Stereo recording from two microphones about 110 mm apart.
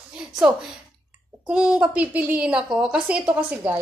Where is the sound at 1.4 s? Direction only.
10° right (ahead or behind).